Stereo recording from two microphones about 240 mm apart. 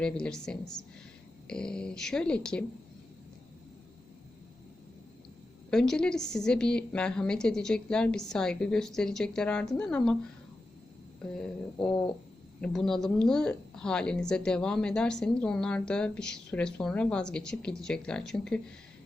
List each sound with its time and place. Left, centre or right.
0.0 s speech: centre
5.7 s speech: centre
11.3 s speech: centre